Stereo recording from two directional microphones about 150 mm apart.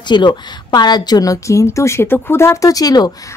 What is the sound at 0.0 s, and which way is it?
Speech, 30° left (ahead or behind).